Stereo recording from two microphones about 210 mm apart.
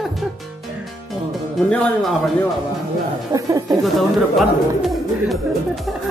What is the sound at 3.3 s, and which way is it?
Speech, 15° right (ahead or behind).